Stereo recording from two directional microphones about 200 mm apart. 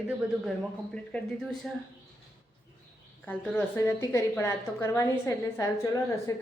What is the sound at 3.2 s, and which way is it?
A woman's voice, 10° left (ahead or behind).